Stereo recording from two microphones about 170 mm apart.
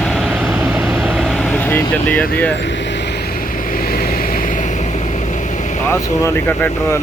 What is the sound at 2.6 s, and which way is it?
Vehicle, 90° left.